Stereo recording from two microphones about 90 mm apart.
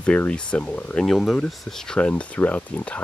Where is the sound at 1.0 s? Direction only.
5° left (ahead or behind).